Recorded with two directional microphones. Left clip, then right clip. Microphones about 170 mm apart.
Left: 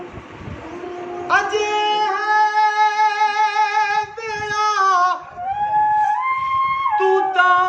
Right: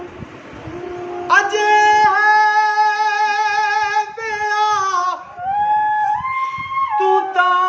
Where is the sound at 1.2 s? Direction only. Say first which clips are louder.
Right 4 dB; 65° right (ahead or behind).